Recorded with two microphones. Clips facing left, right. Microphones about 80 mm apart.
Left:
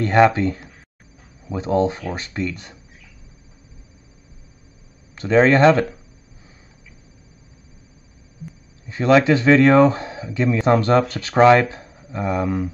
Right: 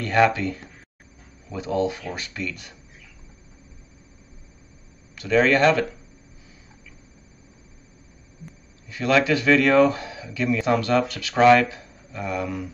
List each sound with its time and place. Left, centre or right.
0.0 s speech: left
5.1 s speech: left
8.8 s speech: left